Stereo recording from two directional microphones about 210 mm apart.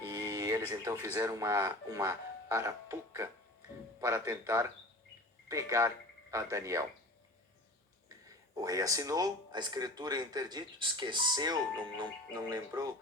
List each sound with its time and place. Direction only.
0.1 s a man's voice: 15° right (ahead or behind)
8.6 s speech: 15° right (ahead or behind)